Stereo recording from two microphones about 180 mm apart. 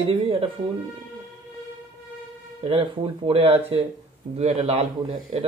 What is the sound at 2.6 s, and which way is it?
Speech, 30° right (ahead or behind).